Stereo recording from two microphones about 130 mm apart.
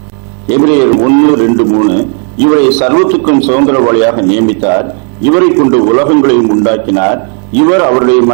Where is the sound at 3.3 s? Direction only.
10° right (ahead or behind).